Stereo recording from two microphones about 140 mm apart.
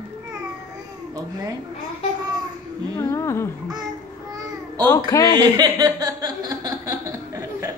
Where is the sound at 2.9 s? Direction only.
20° left (ahead or behind).